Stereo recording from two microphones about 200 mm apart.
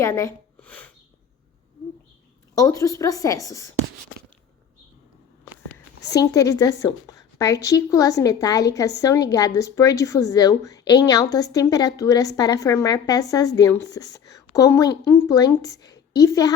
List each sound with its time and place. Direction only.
0.0 s speech: 15° left (ahead or behind)
2.6 s a woman's voice: 15° left (ahead or behind)
6.1 s a woman's voice: 15° left (ahead or behind)